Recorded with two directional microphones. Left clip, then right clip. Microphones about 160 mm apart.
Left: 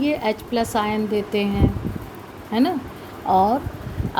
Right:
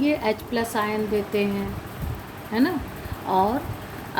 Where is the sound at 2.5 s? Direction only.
45° left (ahead or behind).